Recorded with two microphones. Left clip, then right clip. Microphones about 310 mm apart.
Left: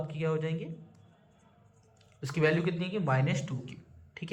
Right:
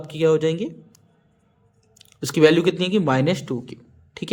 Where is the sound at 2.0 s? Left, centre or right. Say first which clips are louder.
Right 14 dB; right.